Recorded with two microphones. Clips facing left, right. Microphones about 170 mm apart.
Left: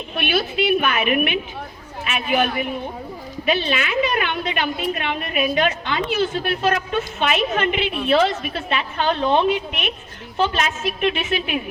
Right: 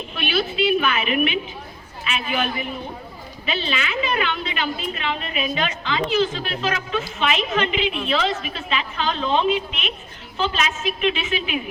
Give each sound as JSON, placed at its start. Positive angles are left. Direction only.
{"t": 0.2, "sound": "a woman's voice", "side_deg": 55}